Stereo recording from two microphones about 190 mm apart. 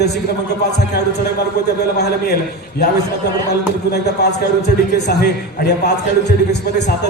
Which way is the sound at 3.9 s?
60° left (ahead or behind).